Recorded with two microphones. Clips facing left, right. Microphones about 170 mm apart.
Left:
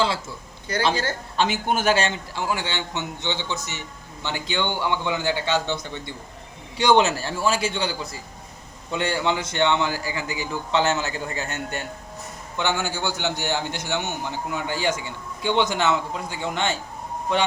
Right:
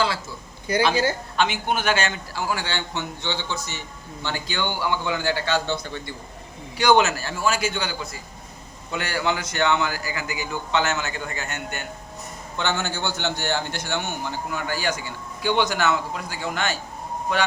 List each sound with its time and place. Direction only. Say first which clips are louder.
0.7 s speech: right 4 dB; 10° right (ahead or behind)
1.4 s a man's voice: left 2 dB; 45° left (ahead or behind)
12.5 s a man's voice: left 1 dB; 15° left (ahead or behind)